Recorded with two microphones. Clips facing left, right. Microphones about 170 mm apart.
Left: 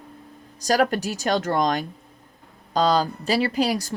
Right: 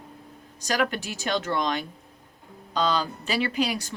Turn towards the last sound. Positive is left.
turn(degrees=35)  # may be behind; listen again after turning